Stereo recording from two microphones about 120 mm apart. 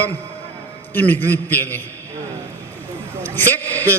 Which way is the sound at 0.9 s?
15° left (ahead or behind).